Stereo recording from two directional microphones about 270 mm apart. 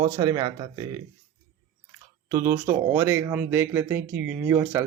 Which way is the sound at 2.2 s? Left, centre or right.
Centre.